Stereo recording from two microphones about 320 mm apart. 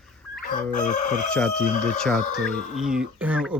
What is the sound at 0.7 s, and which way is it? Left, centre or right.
Chicken, left.